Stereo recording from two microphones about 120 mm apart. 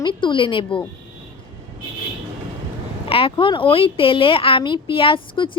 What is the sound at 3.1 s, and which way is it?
Speech, 50° left (ahead or behind).